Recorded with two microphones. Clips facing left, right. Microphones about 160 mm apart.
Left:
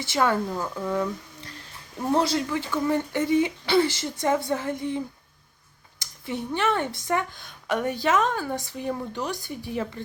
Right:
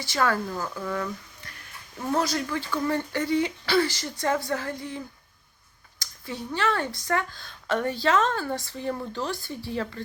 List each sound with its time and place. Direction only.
0.0 s a woman's voice: 25° left (ahead or behind)
1.5 s a sound: 25° left (ahead or behind)
2.5 s a woman's voice: 15° left (ahead or behind)
6.2 s a woman's voice: 20° left (ahead or behind)